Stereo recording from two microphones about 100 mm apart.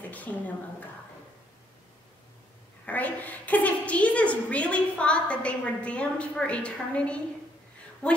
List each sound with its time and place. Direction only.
0.1 s a woman's voice: 15° left (ahead or behind)
2.8 s a woman's voice: 15° left (ahead or behind)